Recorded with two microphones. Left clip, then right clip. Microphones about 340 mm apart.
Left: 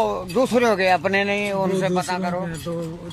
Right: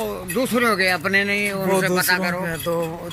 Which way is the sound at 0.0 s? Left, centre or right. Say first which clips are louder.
Left 4 dB; left.